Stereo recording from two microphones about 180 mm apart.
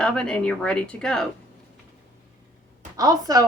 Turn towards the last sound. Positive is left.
turn(degrees=-20)  # may be behind; listen again after turning